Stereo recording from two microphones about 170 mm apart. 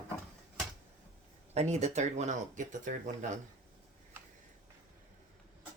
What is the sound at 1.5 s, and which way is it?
Speech, 40° right (ahead or behind).